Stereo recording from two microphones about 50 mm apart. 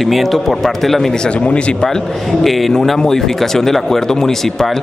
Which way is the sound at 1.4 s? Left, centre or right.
Left.